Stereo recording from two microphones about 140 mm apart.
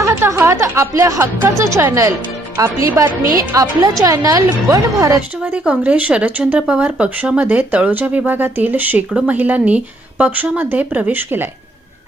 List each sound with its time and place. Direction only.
0.0 s a woman's voice: 20° right (ahead or behind)
5.4 s speech: 10° right (ahead or behind)